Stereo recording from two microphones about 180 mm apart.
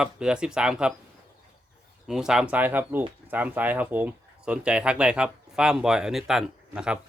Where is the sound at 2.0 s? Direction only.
5° right (ahead or behind).